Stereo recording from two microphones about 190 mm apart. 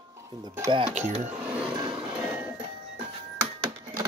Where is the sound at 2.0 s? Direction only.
5° right (ahead or behind).